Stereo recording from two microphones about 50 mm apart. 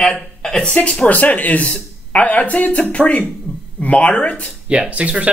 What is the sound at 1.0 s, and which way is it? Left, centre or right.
Speech, left.